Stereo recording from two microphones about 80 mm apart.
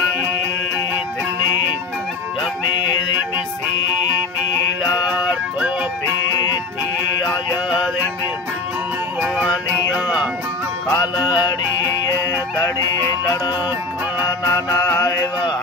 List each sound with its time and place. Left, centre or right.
9.9 s music: centre
11.1 s music: left
14.5 s music: left